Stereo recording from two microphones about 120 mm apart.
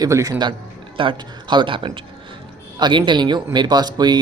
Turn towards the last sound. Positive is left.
turn(degrees=-35)  # may be behind; listen again after turning